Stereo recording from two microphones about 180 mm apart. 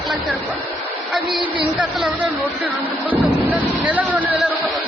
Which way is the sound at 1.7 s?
5° right (ahead or behind).